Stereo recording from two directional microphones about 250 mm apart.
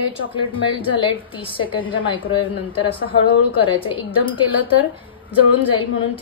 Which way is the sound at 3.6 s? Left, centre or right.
Left.